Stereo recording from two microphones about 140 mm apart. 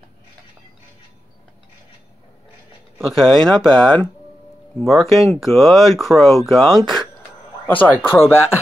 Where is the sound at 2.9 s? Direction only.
5° left (ahead or behind).